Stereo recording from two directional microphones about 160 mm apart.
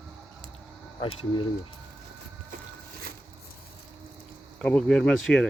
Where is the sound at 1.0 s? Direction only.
35° left (ahead or behind).